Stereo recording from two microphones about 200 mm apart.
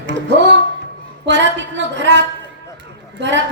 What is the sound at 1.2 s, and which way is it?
A woman's voice, 60° right (ahead or behind).